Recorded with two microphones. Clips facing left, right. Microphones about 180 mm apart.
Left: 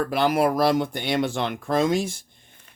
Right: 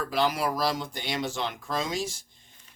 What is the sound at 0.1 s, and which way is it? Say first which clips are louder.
Speech: left 4 dB; 55° left (ahead or behind).